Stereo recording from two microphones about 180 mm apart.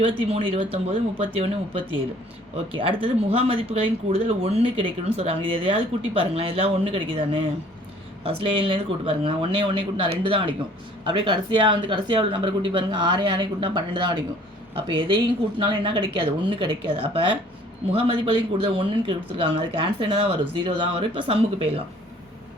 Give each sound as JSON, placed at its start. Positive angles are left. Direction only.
{"t": 0.3, "sound": "speech", "side_deg": -30}